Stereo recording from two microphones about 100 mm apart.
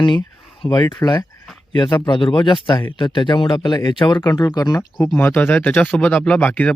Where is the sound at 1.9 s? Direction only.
50° left (ahead or behind).